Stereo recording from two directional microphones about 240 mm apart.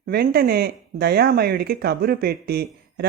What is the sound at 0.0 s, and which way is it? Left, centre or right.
Speech, right.